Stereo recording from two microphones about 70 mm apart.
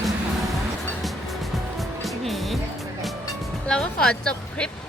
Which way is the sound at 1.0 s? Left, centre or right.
Centre.